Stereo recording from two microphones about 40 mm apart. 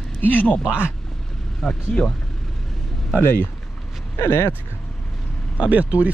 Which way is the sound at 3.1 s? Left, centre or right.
Left.